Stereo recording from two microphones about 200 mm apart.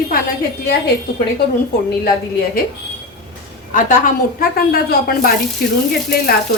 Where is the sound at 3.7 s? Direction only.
40° left (ahead or behind).